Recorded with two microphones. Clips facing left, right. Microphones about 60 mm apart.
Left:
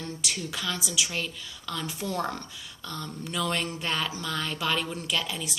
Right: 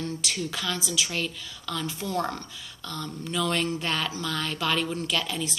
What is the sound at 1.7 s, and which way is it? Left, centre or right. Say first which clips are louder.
A woman's voice: right 2 dB; left.